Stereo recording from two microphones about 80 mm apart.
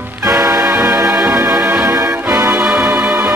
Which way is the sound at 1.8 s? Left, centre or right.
Right.